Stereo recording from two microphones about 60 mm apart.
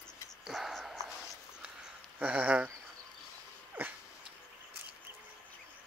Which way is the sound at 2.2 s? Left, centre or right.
Right.